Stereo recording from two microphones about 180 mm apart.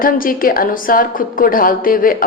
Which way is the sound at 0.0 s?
50° left (ahead or behind).